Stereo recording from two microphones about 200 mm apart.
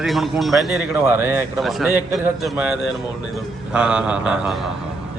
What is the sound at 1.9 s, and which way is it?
Speech, 10° right (ahead or behind).